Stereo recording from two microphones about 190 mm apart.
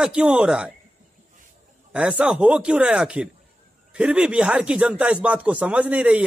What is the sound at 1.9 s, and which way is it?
A man's voice, 5° right (ahead or behind).